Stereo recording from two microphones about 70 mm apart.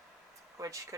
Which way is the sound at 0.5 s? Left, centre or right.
Right.